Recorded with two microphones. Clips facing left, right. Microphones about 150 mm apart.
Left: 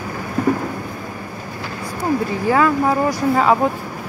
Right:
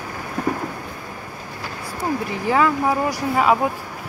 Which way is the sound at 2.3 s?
20° right (ahead or behind).